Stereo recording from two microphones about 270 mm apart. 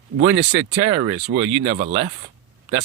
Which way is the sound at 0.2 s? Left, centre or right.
Centre.